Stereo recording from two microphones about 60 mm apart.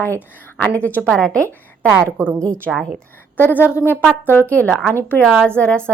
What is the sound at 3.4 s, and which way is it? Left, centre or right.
Speech, left.